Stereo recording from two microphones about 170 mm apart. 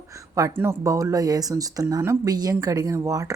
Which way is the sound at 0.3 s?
15° right (ahead or behind).